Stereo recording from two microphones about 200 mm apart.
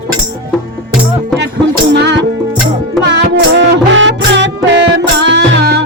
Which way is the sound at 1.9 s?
60° right (ahead or behind).